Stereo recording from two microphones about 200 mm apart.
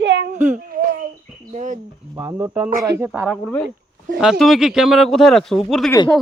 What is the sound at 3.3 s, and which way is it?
Speech, 5° left (ahead or behind).